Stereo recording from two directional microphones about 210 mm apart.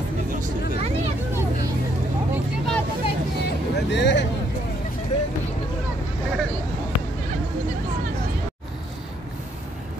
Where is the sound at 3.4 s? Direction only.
55° left (ahead or behind).